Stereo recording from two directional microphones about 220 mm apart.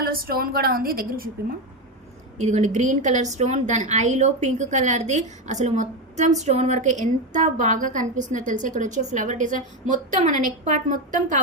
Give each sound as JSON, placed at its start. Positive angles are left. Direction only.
{"t": 0.0, "sound": "a woman's voice", "side_deg": -40}